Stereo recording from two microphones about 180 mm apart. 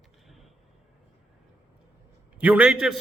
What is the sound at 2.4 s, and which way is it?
Speech, 5° right (ahead or behind).